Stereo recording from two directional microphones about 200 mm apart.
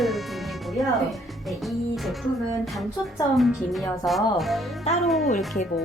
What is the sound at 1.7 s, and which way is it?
Speech, centre (ahead or behind).